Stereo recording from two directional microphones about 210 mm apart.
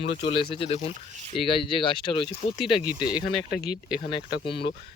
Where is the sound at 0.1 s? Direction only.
25° left (ahead or behind).